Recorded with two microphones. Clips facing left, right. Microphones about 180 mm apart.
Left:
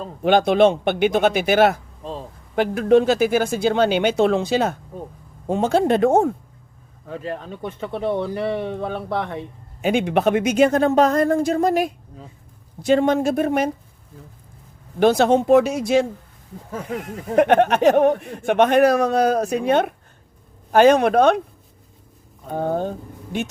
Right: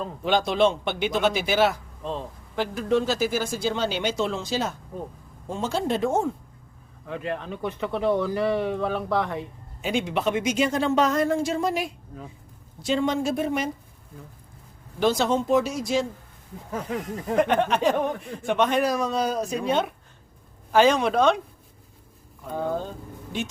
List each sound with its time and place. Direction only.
0.2 s a man's voice: 55° left (ahead or behind)
7.1 s speech: 35° left (ahead or behind)
8.0 s speech: 25° left (ahead or behind)
9.8 s a man's voice: 60° left (ahead or behind)
14.9 s a man's voice: 60° left (ahead or behind)
17.3 s a man's voice: 65° left (ahead or behind)
22.4 s speech: 55° left (ahead or behind)